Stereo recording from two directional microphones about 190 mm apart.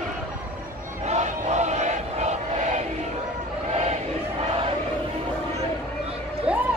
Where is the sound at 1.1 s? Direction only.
35° right (ahead or behind).